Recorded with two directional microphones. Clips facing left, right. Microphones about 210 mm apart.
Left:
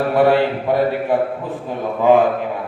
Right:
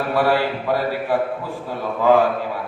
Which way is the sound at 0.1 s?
20° left (ahead or behind).